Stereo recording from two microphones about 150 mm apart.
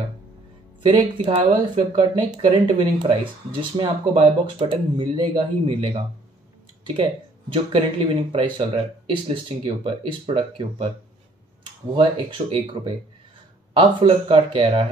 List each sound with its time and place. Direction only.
0.8 s speech: 35° right (ahead or behind)
11.9 s speech: 35° right (ahead or behind)